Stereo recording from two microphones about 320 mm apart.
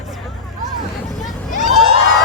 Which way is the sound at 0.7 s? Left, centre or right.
Centre.